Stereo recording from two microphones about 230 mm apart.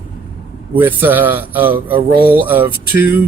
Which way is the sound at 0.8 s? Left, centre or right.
Centre.